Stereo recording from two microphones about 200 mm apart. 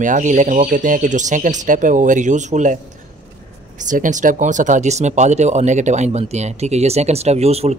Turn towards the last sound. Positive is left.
turn(degrees=-30)  # may be behind; listen again after turning